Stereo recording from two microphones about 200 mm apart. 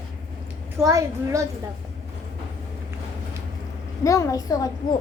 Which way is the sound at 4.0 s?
15° left (ahead or behind).